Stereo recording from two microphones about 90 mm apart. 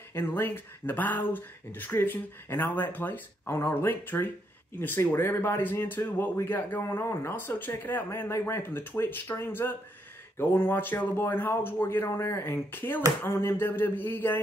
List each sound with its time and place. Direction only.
0.1 s speech: 25° left (ahead or behind)